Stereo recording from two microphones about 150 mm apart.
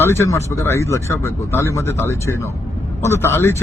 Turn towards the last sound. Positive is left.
turn(degrees=15)  # may be behind; listen again after turning